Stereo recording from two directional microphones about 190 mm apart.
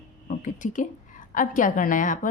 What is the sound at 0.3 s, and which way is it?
A woman's voice, 40° left (ahead or behind).